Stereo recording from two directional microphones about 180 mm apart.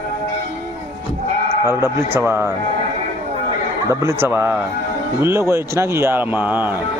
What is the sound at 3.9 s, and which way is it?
A man's voice, 20° right (ahead or behind).